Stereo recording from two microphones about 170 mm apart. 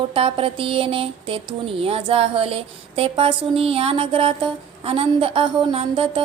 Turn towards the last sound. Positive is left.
turn(degrees=-30)  # may be behind; listen again after turning